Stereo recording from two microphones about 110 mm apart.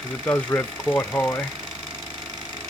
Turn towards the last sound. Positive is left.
turn(degrees=20)  # may be behind; listen again after turning